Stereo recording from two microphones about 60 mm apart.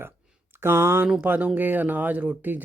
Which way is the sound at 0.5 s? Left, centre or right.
Right.